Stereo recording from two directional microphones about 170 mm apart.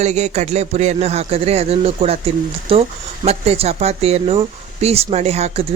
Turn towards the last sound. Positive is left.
turn(degrees=-40)  # may be behind; listen again after turning